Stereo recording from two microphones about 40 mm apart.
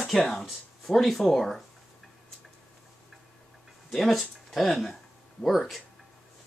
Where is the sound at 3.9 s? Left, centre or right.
Centre.